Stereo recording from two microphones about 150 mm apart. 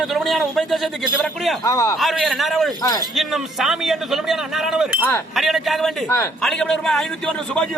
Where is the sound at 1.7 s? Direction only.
25° left (ahead or behind).